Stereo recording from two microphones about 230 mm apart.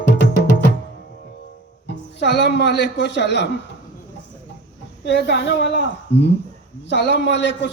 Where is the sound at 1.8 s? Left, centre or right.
Left.